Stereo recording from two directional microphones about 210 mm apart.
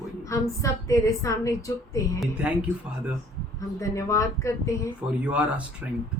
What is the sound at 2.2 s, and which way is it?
Speech, 5° right (ahead or behind).